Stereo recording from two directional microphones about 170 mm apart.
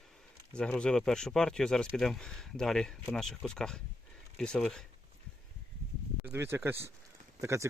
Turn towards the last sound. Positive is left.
turn(degrees=-15)  # may be behind; listen again after turning